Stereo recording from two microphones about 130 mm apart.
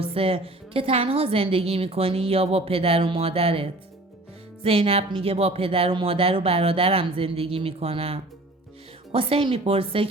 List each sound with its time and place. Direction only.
0.0 s a woman's voice: 45° right (ahead or behind)